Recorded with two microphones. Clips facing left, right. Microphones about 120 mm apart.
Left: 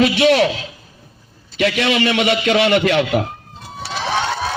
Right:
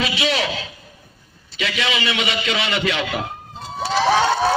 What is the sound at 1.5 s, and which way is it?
A man's voice, 55° left (ahead or behind).